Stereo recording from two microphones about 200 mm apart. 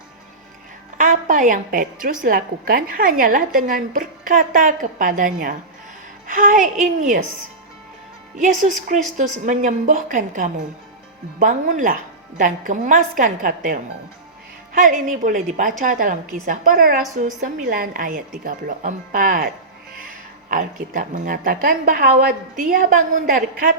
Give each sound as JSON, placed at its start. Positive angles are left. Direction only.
{"t": 0.9, "sound": "a sound", "side_deg": -40}
{"t": 2.2, "sound": "speech", "side_deg": -45}
{"t": 8.4, "sound": "a woman's voice", "side_deg": -40}